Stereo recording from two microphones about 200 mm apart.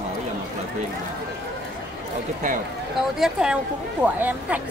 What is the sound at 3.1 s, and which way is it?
Speech, 5° right (ahead or behind).